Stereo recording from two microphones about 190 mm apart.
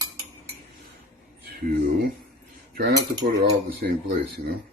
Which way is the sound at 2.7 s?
50° right (ahead or behind).